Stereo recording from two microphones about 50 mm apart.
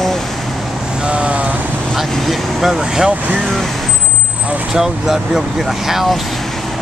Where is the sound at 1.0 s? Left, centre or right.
Right.